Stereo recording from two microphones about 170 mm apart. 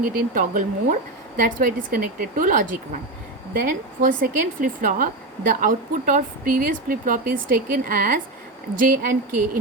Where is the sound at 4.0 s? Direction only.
55° right (ahead or behind).